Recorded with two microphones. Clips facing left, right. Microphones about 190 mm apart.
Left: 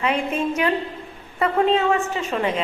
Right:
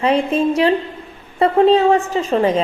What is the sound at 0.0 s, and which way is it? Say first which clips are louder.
A woman's voice: right 7 dB; 35° right (ahead or behind).